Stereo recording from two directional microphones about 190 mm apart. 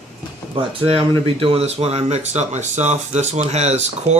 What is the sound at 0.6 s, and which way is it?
Speech, 30° right (ahead or behind).